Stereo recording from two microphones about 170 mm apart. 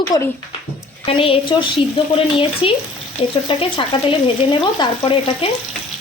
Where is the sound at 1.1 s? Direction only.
35° left (ahead or behind).